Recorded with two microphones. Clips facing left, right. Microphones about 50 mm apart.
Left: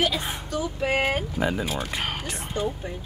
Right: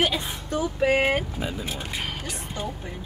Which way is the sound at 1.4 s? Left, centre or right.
Left.